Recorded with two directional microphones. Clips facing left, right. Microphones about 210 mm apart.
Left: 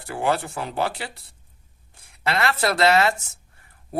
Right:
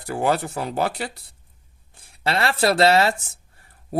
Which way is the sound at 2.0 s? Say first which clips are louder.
Right 1 dB; 30° right (ahead or behind).